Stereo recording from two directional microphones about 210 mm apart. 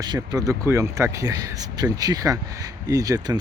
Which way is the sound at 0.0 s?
20° right (ahead or behind).